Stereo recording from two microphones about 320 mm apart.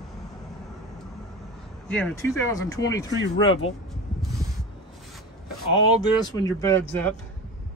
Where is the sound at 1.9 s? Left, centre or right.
Centre.